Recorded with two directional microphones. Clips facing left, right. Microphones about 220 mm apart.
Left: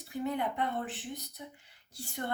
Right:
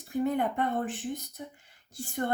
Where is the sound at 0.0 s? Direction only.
50° right (ahead or behind).